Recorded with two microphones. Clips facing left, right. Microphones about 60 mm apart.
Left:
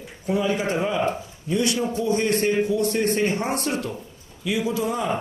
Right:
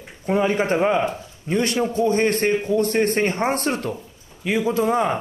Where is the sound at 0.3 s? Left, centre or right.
Right.